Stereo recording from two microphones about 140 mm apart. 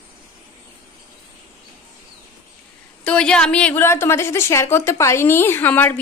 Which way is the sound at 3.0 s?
5° left (ahead or behind).